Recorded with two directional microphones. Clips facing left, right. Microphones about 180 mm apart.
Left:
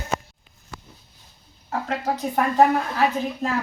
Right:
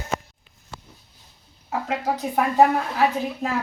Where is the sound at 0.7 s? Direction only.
25° right (ahead or behind).